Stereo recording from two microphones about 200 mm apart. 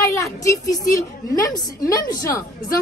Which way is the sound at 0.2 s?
15° left (ahead or behind).